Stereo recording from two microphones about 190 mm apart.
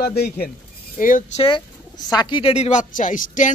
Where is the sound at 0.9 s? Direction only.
45° left (ahead or behind).